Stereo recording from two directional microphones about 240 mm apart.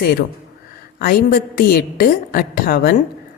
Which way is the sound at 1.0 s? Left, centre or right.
Left.